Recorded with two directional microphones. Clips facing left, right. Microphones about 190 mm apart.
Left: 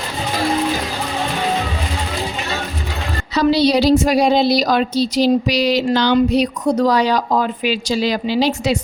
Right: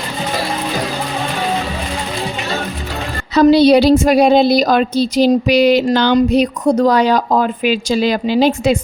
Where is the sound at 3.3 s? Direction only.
50° right (ahead or behind).